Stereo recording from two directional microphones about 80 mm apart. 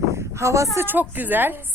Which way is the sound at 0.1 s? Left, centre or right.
Right.